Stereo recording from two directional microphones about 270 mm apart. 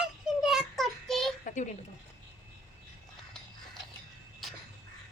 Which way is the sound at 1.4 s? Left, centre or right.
Left.